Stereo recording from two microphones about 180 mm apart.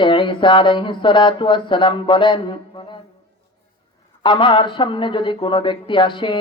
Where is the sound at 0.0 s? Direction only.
25° left (ahead or behind).